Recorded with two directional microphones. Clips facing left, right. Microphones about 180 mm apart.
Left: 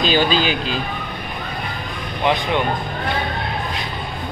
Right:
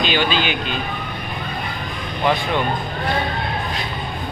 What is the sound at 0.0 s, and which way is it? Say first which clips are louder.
Speech: left 2 dB; 40° left (ahead or behind).